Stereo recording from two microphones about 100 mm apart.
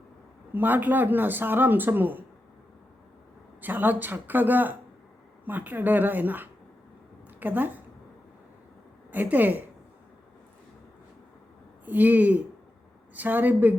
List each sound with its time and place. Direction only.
0.5 s speech: 20° right (ahead or behind)
3.6 s a woman's voice: 20° right (ahead or behind)
9.1 s a woman's voice: 20° right (ahead or behind)
11.9 s a woman's voice: 15° right (ahead or behind)